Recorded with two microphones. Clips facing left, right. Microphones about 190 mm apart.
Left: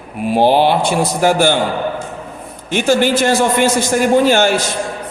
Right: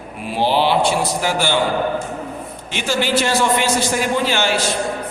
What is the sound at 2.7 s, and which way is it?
A man's voice, 50° left (ahead or behind).